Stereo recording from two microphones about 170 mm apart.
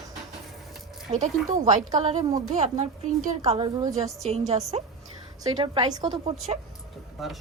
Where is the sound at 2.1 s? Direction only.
25° right (ahead or behind).